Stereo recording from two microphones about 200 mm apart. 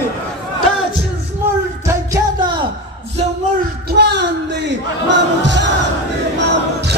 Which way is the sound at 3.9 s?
55° right (ahead or behind).